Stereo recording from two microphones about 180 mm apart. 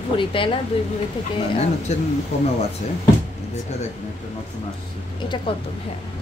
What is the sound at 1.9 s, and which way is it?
Speech, 35° left (ahead or behind).